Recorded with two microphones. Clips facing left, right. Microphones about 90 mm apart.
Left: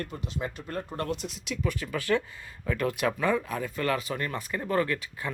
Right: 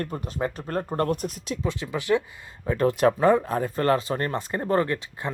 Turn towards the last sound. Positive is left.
turn(degrees=-25)  # may be behind; listen again after turning